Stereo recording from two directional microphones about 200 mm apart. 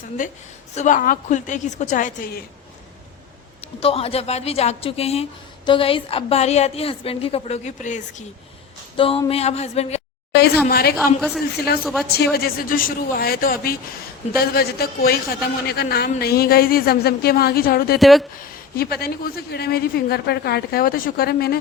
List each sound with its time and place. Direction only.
0.2 s a woman's voice: 40° left (ahead or behind)
3.6 s a woman's voice: 30° left (ahead or behind)
9.0 s a woman's voice: 25° left (ahead or behind)
10.3 s a woman's voice: 55° left (ahead or behind)
10.9 s a woman's voice: centre (ahead or behind)
11.5 s a man's voice: 50° left (ahead or behind)
11.8 s a woman's voice: centre (ahead or behind)
12.1 s a man's voice: 50° left (ahead or behind)
18.0 s a woman's voice: centre (ahead or behind)
18.3 s a man's voice: 50° left (ahead or behind)